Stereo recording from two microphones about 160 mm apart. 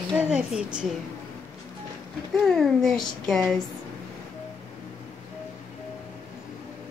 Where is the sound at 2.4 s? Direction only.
Centre (ahead or behind).